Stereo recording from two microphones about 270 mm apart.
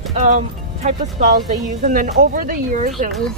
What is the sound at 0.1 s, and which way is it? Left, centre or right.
Speech, right.